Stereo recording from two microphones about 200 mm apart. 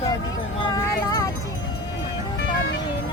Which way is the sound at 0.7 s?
15° left (ahead or behind).